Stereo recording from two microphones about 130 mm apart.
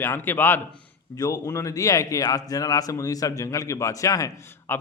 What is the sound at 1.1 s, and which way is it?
A man's voice, 30° left (ahead or behind).